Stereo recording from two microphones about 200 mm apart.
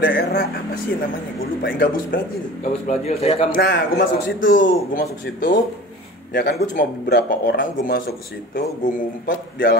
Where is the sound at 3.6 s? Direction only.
60° left (ahead or behind).